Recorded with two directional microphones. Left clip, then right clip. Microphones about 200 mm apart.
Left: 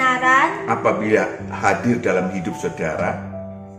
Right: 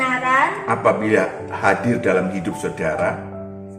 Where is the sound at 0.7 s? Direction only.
Centre (ahead or behind).